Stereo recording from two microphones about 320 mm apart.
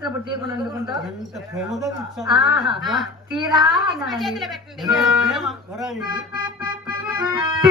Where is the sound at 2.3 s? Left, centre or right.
Centre.